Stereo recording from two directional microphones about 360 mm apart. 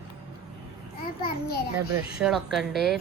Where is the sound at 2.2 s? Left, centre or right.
Centre.